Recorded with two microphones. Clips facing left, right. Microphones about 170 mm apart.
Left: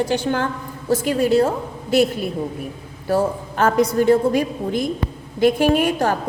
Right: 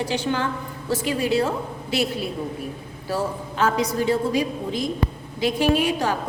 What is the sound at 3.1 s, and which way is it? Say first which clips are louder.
A woman's voice: left 6 dB; 50° left (ahead or behind).